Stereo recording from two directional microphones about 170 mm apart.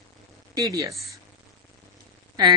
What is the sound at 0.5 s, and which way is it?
Speech, 20° right (ahead or behind).